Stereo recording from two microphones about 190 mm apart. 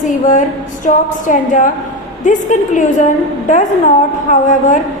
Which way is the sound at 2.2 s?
40° left (ahead or behind).